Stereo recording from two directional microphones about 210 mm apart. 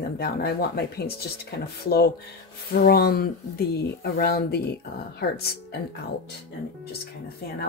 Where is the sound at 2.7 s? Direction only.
45° left (ahead or behind).